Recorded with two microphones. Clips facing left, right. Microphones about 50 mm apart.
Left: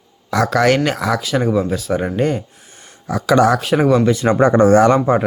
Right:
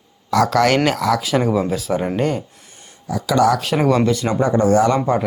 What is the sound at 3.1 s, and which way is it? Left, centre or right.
Speech, left.